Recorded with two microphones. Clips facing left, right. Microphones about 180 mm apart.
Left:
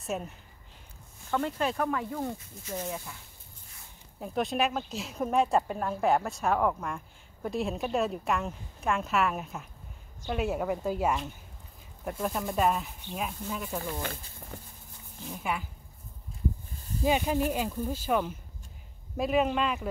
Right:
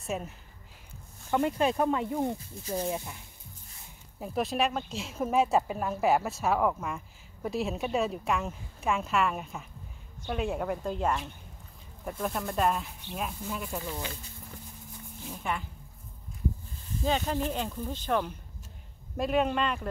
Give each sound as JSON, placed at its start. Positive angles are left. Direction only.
{"t": 0.0, "sound": "speech", "side_deg": 0}
{"t": 1.3, "sound": "speech", "side_deg": -15}
{"t": 2.3, "sound": "speech", "side_deg": -35}
{"t": 4.2, "sound": "speech", "side_deg": 0}
{"t": 15.2, "sound": "speech", "side_deg": 5}
{"t": 17.0, "sound": "speech", "side_deg": 10}